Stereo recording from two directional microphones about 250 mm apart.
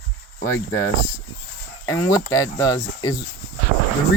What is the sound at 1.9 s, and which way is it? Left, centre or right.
Speech, centre.